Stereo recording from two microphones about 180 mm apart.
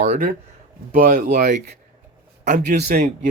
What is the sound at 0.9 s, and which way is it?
Speech, 45° right (ahead or behind).